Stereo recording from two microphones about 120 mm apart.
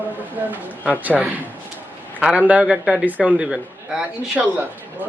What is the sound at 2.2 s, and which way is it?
A man's voice, 10° right (ahead or behind).